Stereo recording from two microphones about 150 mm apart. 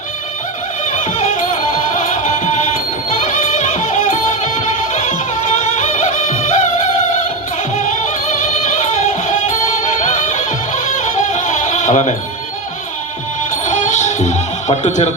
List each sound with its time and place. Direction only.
0.9 s music: 55° left (ahead or behind)
9.2 s music: 55° left (ahead or behind)
13.7 s music: 55° left (ahead or behind)